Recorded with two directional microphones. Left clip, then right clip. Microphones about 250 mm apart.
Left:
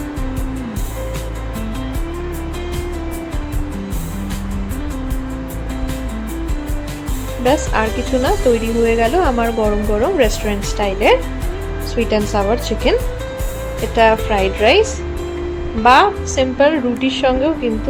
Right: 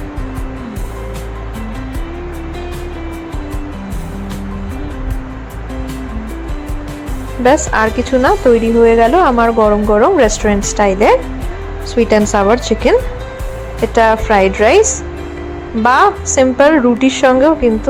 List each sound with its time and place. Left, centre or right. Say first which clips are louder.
7.4 s a woman's voice: right 5 dB; centre